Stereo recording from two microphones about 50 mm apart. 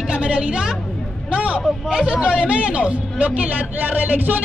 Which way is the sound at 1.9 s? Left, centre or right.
Centre.